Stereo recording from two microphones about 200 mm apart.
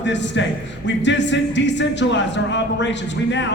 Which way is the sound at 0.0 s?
65° left (ahead or behind).